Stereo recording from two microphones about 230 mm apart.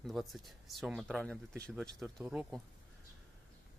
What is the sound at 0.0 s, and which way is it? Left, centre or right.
Speech, centre.